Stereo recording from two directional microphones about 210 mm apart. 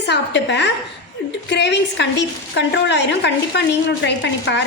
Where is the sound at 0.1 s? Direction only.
55° left (ahead or behind).